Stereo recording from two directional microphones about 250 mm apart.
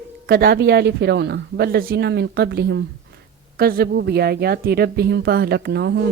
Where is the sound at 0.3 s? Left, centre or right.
Right.